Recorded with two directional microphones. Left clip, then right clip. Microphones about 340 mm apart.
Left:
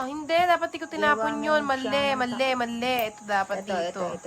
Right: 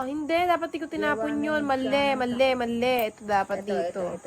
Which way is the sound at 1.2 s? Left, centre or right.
Left.